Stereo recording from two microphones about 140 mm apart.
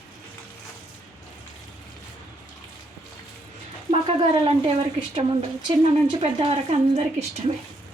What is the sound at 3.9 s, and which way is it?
Speech, 40° right (ahead or behind).